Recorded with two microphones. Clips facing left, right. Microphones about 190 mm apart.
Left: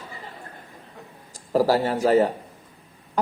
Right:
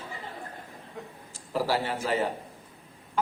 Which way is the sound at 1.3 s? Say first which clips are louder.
Left 8 dB; 40° left (ahead or behind).